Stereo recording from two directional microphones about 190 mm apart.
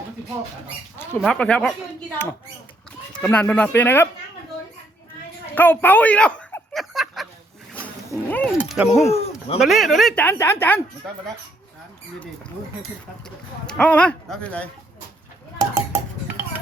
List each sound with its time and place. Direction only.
1.2 s speech: 5° left (ahead or behind)
3.2 s speech: 10° left (ahead or behind)
5.5 s a sound: 10° left (ahead or behind)
8.1 s speech: 10° left (ahead or behind)
8.5 s speech: 5° right (ahead or behind)
9.0 s a sound: 30° left (ahead or behind)
9.6 s speech: centre (ahead or behind)
13.7 s speech: 5° left (ahead or behind)
15.5 s a sound: 15° right (ahead or behind)